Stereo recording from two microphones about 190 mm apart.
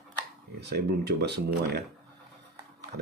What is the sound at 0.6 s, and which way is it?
Speech, 60° right (ahead or behind).